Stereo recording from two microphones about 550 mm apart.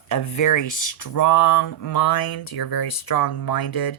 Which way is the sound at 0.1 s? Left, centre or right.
Left.